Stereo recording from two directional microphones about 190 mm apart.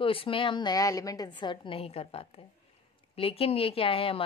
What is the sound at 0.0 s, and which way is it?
A woman's voice, 30° left (ahead or behind).